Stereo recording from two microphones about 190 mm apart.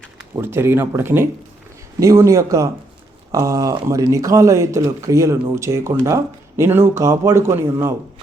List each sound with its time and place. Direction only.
0.3 s speech: 10° right (ahead or behind)